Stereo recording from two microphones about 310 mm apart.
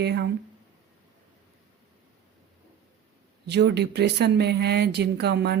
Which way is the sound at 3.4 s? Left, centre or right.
Right.